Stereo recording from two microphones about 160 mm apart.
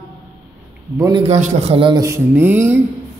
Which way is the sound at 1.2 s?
45° right (ahead or behind).